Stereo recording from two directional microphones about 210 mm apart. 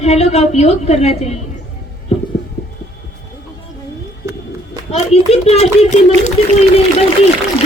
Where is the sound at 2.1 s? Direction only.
30° left (ahead or behind).